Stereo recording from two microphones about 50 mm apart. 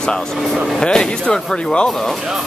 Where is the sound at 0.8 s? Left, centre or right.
Centre.